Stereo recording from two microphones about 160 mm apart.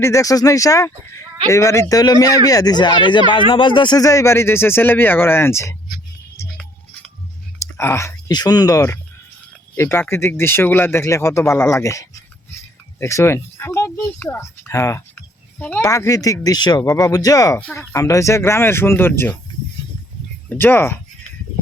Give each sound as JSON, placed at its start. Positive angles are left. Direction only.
{"t": 0.0, "sound": "speech", "side_deg": 20}
{"t": 7.6, "sound": "speech", "side_deg": 15}
{"t": 17.6, "sound": "speech", "side_deg": 10}
{"t": 17.9, "sound": "speech", "side_deg": 20}
{"t": 20.5, "sound": "speech", "side_deg": 10}